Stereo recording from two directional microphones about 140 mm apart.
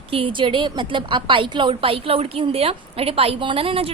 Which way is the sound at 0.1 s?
40° right (ahead or behind).